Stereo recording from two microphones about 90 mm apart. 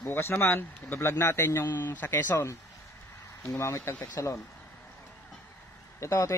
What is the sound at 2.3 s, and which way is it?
Speech, 35° left (ahead or behind).